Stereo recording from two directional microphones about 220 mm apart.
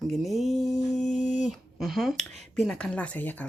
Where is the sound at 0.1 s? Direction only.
Centre (ahead or behind).